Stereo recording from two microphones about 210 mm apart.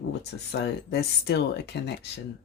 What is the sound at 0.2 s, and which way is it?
Speech, 55° left (ahead or behind).